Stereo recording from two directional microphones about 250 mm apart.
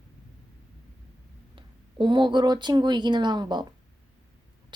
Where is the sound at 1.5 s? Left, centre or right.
Centre.